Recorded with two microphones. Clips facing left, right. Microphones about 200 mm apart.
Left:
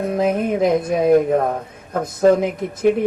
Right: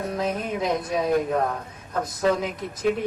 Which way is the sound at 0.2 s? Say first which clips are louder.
Left 10 dB; 55° left (ahead or behind).